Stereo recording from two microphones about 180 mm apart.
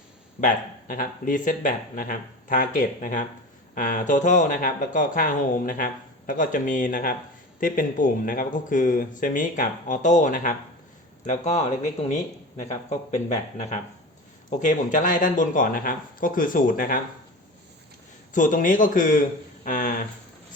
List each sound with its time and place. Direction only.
0.4 s speech: 50° left (ahead or behind)
12.9 s speech: 40° left (ahead or behind)
18.3 s speech: 50° left (ahead or behind)